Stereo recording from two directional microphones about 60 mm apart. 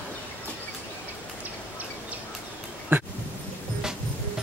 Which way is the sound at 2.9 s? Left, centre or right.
Right.